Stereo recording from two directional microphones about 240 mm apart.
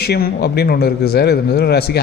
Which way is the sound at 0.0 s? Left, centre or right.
Left.